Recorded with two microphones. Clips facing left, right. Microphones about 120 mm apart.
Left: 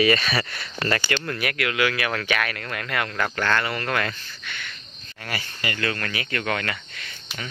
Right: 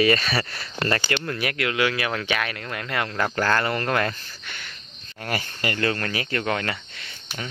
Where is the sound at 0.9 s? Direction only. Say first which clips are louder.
Even; 20° right (ahead or behind).